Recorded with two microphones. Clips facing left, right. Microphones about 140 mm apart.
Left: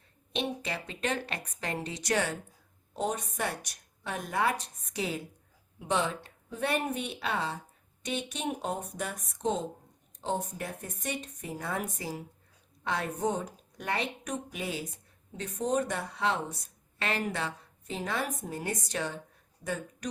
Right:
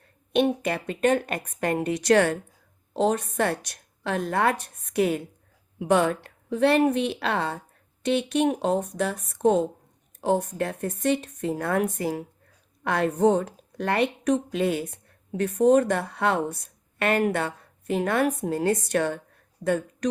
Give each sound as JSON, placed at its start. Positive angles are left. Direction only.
{"t": 0.3, "sound": "a woman's voice", "side_deg": -55}
{"t": 3.7, "sound": "a sound", "side_deg": -65}
{"t": 4.3, "sound": "a woman's voice", "side_deg": -60}
{"t": 6.9, "sound": "a woman's voice", "side_deg": 0}
{"t": 7.2, "sound": "a woman's voice", "side_deg": -60}
{"t": 9.3, "sound": "a woman's voice", "side_deg": -60}